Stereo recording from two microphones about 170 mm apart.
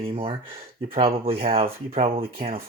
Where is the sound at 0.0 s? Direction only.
30° right (ahead or behind).